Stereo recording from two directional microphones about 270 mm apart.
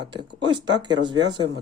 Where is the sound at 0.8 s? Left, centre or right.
Centre.